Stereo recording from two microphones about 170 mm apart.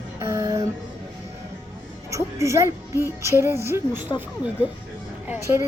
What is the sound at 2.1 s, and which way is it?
A woman's voice, 15° right (ahead or behind).